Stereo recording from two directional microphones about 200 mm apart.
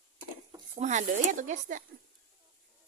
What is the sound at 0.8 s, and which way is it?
Speech, 35° right (ahead or behind).